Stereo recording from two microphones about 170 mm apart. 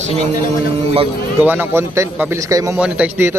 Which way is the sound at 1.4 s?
10° right (ahead or behind).